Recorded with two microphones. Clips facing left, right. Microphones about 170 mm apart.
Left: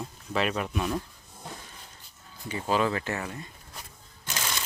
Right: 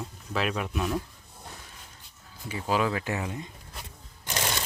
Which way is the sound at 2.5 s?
5° right (ahead or behind).